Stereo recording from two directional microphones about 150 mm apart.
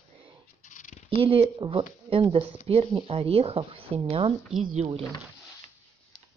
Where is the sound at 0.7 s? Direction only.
55° left (ahead or behind).